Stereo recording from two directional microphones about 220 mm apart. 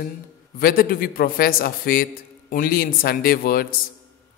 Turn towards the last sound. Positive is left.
turn(degrees=45)  # may be behind; listen again after turning